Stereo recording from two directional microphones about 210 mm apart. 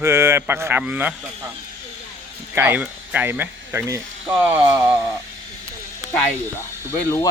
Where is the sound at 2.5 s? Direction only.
10° right (ahead or behind).